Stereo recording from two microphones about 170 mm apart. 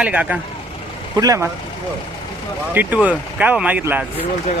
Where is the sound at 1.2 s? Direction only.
20° right (ahead or behind).